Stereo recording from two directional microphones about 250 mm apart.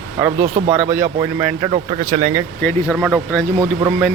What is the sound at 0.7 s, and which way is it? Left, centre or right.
Speech, right.